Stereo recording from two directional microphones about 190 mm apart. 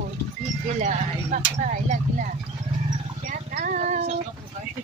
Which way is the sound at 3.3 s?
45° right (ahead or behind).